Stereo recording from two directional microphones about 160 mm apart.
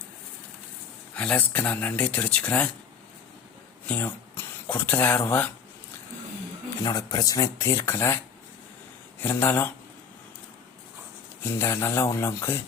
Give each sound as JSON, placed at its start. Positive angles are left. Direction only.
{"t": 1.1, "sound": "speech", "side_deg": 5}
{"t": 3.8, "sound": "speech", "side_deg": 10}
{"t": 6.8, "sound": "speech", "side_deg": 25}
{"t": 9.2, "sound": "speech", "side_deg": 15}
{"t": 11.4, "sound": "speech", "side_deg": 15}